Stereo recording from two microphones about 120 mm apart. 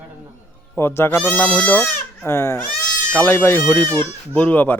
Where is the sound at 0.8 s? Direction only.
20° left (ahead or behind).